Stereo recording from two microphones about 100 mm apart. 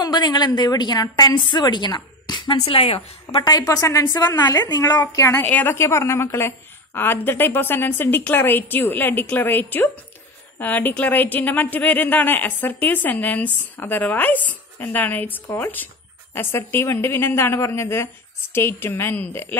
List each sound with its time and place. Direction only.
0.0 s a woman's voice: 45° left (ahead or behind)
2.5 s a woman's voice: 75° left (ahead or behind); by 3.4 s 90° left
3.4 s a woman's voice: 40° left (ahead or behind)
5.0 s a woman's voice: 30° left (ahead or behind)